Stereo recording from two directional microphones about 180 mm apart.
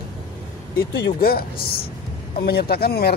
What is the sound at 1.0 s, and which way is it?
Speech, 60° left (ahead or behind).